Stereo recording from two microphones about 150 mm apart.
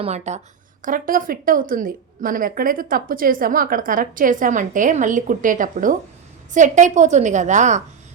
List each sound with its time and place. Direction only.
0.0 s a woman's voice: 45° right (ahead or behind)